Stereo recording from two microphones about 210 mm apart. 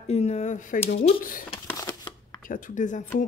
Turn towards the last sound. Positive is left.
turn(degrees=35)  # may be behind; listen again after turning